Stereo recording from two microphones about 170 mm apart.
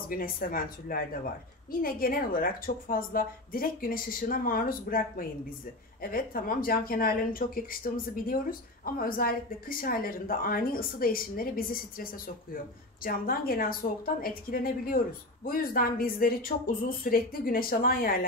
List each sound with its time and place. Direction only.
0.1 s speech: 55° left (ahead or behind)